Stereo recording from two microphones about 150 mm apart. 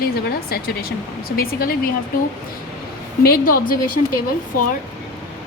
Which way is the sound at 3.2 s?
80° left.